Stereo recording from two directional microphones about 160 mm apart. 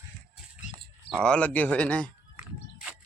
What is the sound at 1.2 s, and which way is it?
Speech, 5° left (ahead or behind).